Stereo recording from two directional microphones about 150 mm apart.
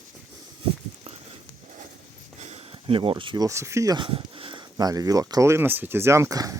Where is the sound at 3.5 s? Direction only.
20° right (ahead or behind).